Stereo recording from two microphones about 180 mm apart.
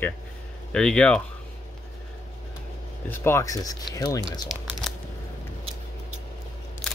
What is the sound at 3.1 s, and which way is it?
Speech, 15° left (ahead or behind).